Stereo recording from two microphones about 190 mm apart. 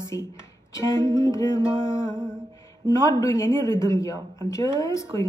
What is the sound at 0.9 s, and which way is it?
Music, 20° right (ahead or behind).